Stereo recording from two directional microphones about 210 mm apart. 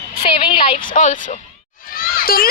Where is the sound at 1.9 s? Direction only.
45° left (ahead or behind).